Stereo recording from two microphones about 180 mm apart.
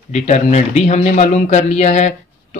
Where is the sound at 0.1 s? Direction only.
40° left (ahead or behind).